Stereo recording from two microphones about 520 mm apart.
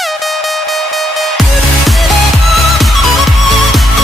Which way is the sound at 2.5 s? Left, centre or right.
Centre.